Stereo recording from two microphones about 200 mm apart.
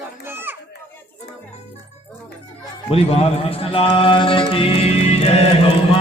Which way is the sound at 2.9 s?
30° left (ahead or behind).